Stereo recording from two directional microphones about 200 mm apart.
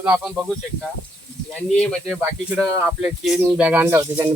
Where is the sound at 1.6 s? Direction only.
5° left (ahead or behind).